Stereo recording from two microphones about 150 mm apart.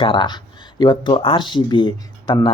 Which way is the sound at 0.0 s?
35° left (ahead or behind).